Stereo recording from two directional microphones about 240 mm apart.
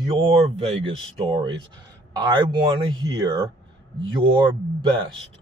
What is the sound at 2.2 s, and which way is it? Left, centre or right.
Speech, centre.